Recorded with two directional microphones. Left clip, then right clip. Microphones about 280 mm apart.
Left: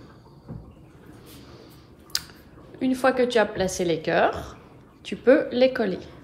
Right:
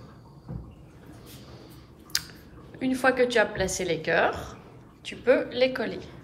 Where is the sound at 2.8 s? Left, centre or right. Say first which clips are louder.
Left 2 dB; centre.